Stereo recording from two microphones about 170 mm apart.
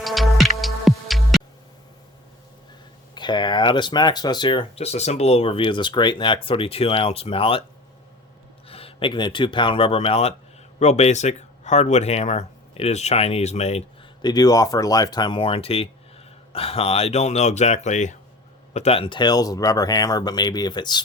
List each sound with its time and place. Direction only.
0.0 s music: centre (ahead or behind)
3.2 s speech: 25° left (ahead or behind)
8.6 s speech: 35° left (ahead or behind)
14.2 s speech: 25° left (ahead or behind)